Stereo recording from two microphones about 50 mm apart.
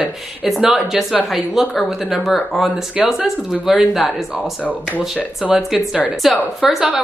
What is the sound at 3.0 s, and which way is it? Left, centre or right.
Speech, centre.